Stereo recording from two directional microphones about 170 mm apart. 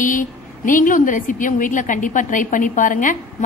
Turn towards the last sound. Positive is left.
turn(degrees=50)  # may be behind; listen again after turning